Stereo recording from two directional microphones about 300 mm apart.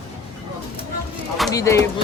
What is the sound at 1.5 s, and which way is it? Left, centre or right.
Speech, centre.